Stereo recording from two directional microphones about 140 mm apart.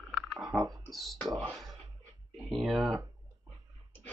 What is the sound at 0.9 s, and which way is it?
Whispering, centre (ahead or behind).